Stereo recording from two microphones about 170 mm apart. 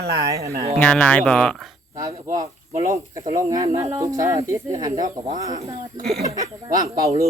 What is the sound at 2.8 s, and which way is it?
Speech, 20° right (ahead or behind).